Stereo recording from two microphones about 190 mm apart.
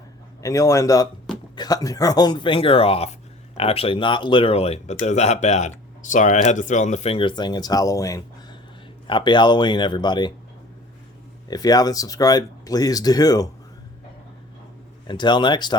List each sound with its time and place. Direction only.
0.4 s a man's voice: 15° left (ahead or behind)
11.4 s speech: 20° left (ahead or behind)
15.0 s speech: 25° left (ahead or behind)